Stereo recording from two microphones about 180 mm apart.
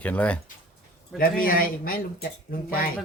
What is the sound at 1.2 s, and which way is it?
Speech, 55° left (ahead or behind).